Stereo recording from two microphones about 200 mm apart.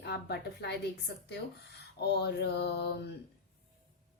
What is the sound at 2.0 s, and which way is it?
Speech, 55° left (ahead or behind).